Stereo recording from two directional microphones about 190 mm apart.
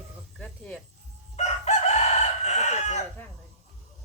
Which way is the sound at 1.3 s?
35° left (ahead or behind).